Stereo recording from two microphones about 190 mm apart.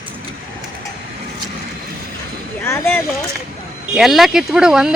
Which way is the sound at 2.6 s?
15° left (ahead or behind).